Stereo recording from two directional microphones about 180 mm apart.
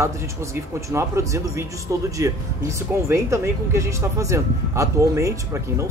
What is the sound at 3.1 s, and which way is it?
Speech, 15° right (ahead or behind).